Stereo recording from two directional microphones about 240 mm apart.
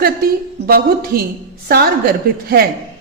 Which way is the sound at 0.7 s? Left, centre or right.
Right.